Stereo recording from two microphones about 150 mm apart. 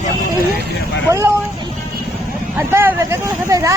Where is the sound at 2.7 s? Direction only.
15° right (ahead or behind).